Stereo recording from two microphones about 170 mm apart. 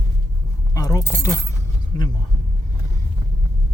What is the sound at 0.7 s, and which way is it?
Keys jangling, 20° left (ahead or behind).